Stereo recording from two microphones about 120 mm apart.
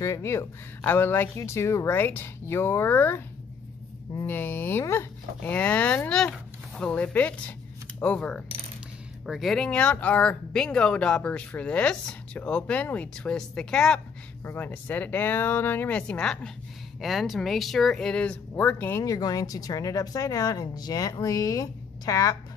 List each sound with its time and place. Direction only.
0.0 s speech: 25° left (ahead or behind)
4.3 s speech: 15° left (ahead or behind); by 22.4 s 30° left (ahead or behind)